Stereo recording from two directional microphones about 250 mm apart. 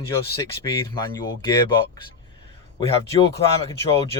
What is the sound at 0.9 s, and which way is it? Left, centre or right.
Speech, centre.